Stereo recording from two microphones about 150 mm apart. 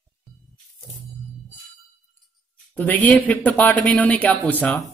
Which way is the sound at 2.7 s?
10° left (ahead or behind).